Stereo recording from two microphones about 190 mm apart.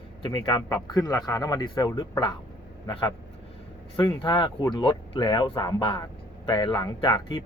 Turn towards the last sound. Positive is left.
turn(degrees=25)  # may be behind; listen again after turning